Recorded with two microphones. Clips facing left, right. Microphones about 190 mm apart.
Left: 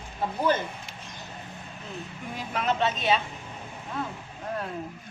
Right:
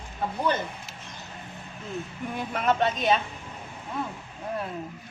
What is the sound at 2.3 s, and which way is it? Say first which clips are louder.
Speech: right 2 dB; 55° right (ahead or behind).